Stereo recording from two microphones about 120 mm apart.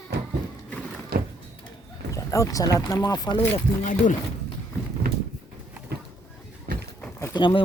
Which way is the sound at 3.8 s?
90° left.